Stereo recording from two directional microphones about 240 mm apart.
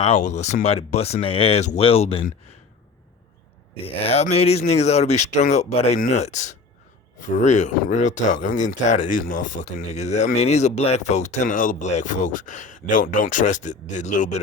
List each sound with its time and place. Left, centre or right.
0.0 s speech: left
3.8 s speech: left